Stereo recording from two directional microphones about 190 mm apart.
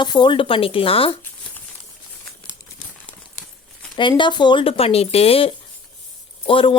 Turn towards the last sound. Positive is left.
turn(degrees=25)  # may be behind; listen again after turning